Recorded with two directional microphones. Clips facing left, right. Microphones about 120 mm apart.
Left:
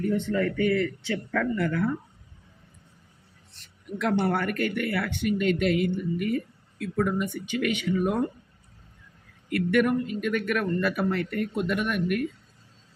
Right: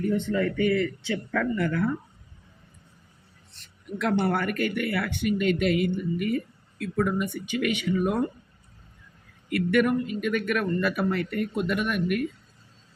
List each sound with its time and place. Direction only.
0.3 s speech: 10° right (ahead or behind)
1.4 s speech: centre (ahead or behind)
3.9 s speech: centre (ahead or behind)
9.5 s speech: 5° right (ahead or behind)